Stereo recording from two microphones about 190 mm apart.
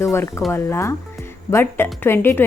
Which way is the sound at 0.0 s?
15° left (ahead or behind).